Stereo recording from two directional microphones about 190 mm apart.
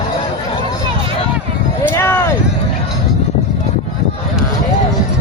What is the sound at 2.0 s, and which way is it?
Vehicle, 10° left (ahead or behind).